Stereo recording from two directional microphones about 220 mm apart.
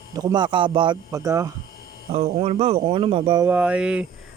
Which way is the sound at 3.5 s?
5° right (ahead or behind).